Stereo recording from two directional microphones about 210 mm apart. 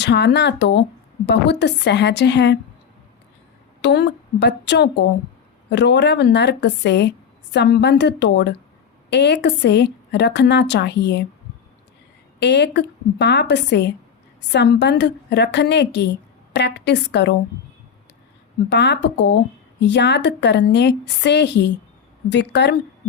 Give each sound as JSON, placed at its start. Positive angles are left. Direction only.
{"t": 0.0, "sound": "a woman's voice", "side_deg": 55}
{"t": 3.8, "sound": "a woman's voice", "side_deg": 55}
{"t": 12.4, "sound": "a woman's voice", "side_deg": 55}
{"t": 18.7, "sound": "a woman's voice", "side_deg": 55}